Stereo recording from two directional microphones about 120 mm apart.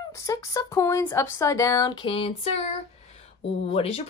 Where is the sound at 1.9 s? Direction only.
50° left (ahead or behind).